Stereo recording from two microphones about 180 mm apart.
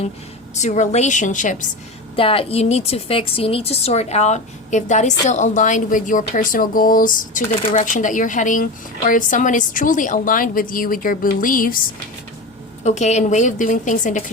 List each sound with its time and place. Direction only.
0.5 s a woman's voice: 40° left (ahead or behind)
2.1 s a woman's voice: 30° left (ahead or behind); by 7.4 s 50° left (ahead or behind)
7.6 s a woman's voice: 30° left (ahead or behind)
7.9 s a woman's voice: 45° left (ahead or behind)
12.8 s a woman's voice: 40° left (ahead or behind)